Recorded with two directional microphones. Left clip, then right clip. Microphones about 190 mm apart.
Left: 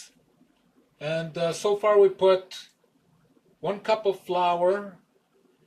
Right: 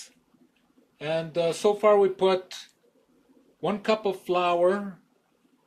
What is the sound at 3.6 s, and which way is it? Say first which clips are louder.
Speech: left 1 dB; 45° right (ahead or behind).